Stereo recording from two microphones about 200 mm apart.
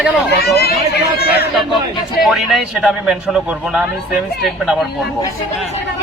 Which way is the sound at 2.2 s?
Centre (ahead or behind).